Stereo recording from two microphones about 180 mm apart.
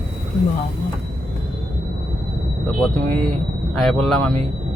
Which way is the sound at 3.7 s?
5° left (ahead or behind).